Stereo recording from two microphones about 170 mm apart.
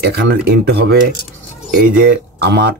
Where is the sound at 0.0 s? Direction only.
85° right.